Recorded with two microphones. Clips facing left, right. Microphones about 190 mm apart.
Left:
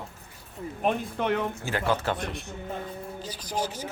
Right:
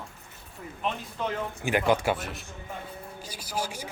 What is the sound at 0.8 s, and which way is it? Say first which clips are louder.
Speech: left 5 dB; 55° left (ahead or behind).